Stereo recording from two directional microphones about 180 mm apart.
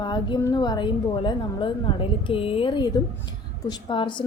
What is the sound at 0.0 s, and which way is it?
A woman's voice, 25° left (ahead or behind).